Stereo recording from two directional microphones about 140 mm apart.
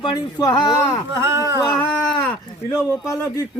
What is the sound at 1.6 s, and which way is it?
Cat, 15° left (ahead or behind).